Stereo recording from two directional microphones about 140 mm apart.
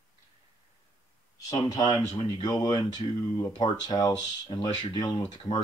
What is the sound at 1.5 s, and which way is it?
Speech, 25° left (ahead or behind).